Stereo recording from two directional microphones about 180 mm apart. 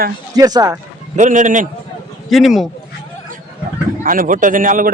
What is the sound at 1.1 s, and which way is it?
Speech, 45° right (ahead or behind).